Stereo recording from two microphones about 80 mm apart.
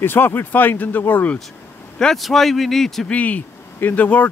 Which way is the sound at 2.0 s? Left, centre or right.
Centre.